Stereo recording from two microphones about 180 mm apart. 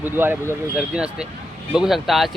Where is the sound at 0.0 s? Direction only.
10° right (ahead or behind).